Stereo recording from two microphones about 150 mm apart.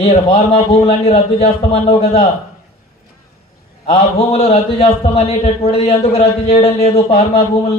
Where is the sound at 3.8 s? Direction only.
40° left (ahead or behind).